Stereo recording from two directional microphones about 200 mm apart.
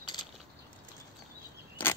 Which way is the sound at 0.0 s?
20° left (ahead or behind).